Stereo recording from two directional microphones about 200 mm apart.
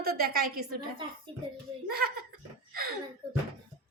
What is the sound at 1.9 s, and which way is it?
A woman's voice, 50° right (ahead or behind).